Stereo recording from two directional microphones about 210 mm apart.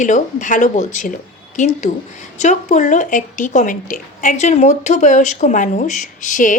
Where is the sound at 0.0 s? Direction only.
35° left (ahead or behind).